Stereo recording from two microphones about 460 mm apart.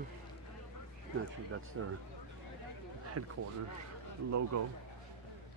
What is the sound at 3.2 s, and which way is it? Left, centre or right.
Speech, right.